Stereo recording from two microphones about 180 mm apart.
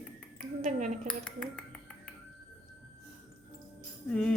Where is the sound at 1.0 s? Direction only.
5° left (ahead or behind).